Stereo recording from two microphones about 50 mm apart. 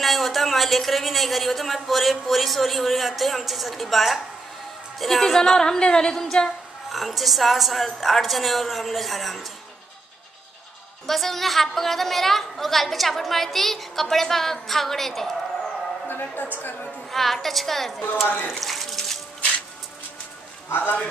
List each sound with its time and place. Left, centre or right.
0.0 s a woman's voice: centre
6.9 s a woman's voice: centre
11.1 s a woman's voice: centre
16.1 s a woman's voice: left
17.1 s a woman's voice: centre
18.6 s a sound: centre
20.7 s speech: left